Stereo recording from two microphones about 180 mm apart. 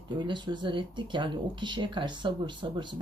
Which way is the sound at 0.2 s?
25° right (ahead or behind).